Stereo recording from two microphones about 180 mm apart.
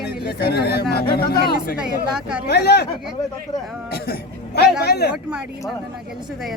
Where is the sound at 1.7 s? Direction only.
5° right (ahead or behind).